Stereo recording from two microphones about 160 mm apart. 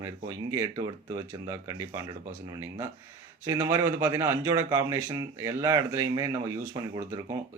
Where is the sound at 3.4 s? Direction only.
25° right (ahead or behind).